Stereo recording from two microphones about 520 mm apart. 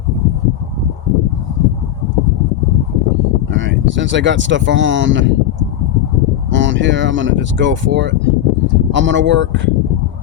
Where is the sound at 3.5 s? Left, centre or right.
Right.